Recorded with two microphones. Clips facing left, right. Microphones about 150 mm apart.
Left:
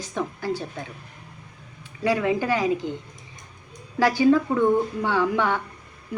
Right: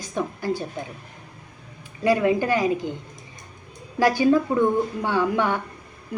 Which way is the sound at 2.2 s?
50° right (ahead or behind).